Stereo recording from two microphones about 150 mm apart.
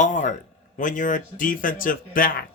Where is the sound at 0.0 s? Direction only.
55° left (ahead or behind).